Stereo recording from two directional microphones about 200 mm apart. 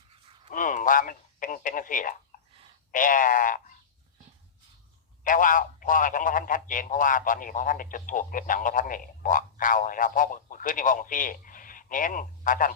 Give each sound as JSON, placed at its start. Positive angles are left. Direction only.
{"t": 0.5, "sound": "radio", "side_deg": 40}
{"t": 2.3, "sound": "a sound", "side_deg": 45}
{"t": 2.9, "sound": "a man's voice", "side_deg": 40}
{"t": 5.2, "sound": "a man's voice", "side_deg": 40}